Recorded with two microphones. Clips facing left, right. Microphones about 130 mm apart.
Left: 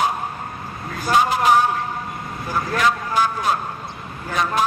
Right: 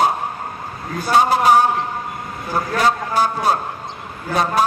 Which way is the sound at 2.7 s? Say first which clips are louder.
Right 2 dB; 35° right (ahead or behind).